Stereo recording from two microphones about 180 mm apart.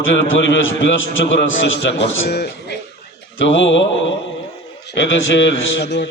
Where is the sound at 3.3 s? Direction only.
90° left.